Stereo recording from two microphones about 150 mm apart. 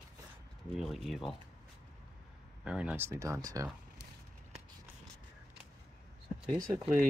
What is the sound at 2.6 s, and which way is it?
Speech, 5° right (ahead or behind).